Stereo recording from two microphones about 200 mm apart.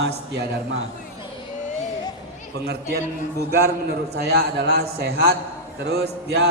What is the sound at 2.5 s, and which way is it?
Speech, 55° right (ahead or behind).